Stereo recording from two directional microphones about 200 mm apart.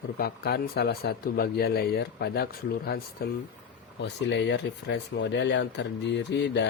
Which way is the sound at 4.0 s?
60° left (ahead or behind).